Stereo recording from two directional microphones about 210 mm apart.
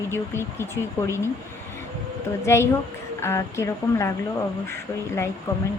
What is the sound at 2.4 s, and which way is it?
Speech, 10° left (ahead or behind).